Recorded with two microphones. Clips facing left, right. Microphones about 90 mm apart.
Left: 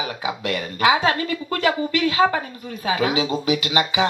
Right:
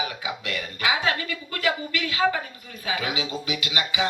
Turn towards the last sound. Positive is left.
turn(degrees=35)  # may be behind; listen again after turning